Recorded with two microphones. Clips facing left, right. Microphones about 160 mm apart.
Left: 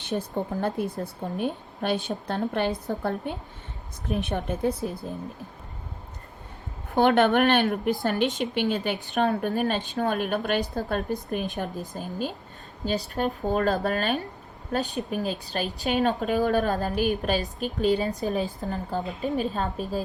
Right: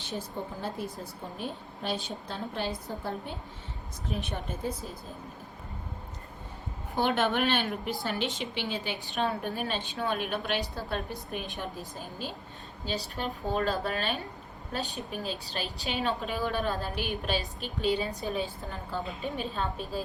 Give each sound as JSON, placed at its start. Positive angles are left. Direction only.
{"t": 0.1, "sound": "a woman's voice", "side_deg": 65}
{"t": 6.9, "sound": "a woman's voice", "side_deg": 60}